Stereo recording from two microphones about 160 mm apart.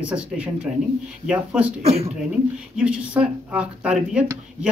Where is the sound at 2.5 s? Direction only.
5° right (ahead or behind).